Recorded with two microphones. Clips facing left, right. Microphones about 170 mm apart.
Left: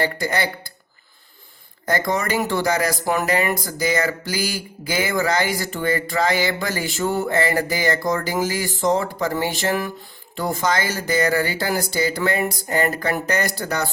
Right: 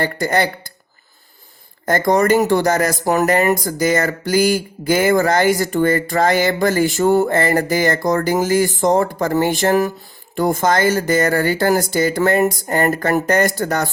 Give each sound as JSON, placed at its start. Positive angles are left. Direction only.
{"t": 0.0, "sound": "speech", "side_deg": -45}
{"t": 1.9, "sound": "speech", "side_deg": -45}